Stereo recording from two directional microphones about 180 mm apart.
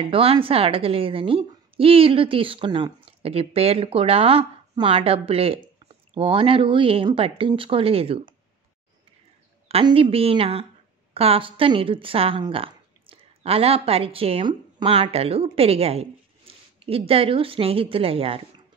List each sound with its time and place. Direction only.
0.1 s a woman's voice: 30° right (ahead or behind)
9.7 s a woman's voice: 30° right (ahead or behind)